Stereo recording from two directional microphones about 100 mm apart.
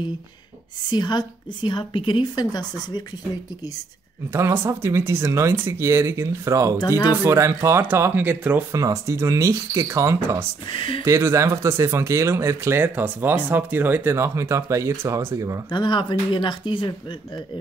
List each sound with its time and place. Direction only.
0.8 s a woman's voice: 45° left (ahead or behind)
4.3 s speech: 30° right (ahead or behind)
8.7 s speech: 30° right (ahead or behind)
15.7 s a woman's voice: 50° left (ahead or behind)